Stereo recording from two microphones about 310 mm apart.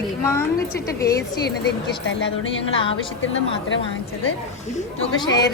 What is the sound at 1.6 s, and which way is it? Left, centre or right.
Speech, left.